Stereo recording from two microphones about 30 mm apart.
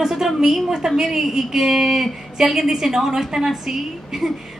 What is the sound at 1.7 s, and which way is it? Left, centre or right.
Speech, centre.